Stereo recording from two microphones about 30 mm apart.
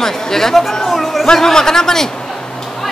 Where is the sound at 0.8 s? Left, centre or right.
Centre.